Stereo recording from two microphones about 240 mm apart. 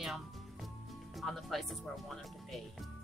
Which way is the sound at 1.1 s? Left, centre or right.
Centre.